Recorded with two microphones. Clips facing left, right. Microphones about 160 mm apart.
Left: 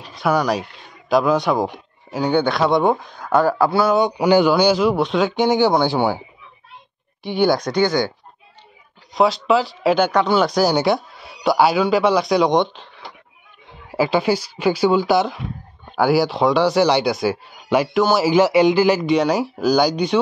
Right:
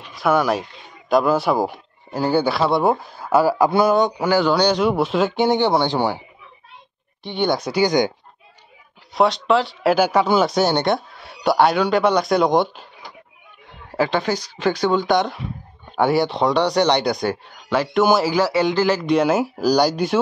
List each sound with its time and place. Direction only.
0.2 s speech: centre (ahead or behind)
3.9 s speech: 10° left (ahead or behind)
7.2 s speech: centre (ahead or behind); by 8.1 s 15° right (ahead or behind)
9.1 s speech: centre (ahead or behind)
13.9 s speech: 10° left (ahead or behind)
18.3 s speech: 15° left (ahead or behind)
19.0 s speech: centre (ahead or behind)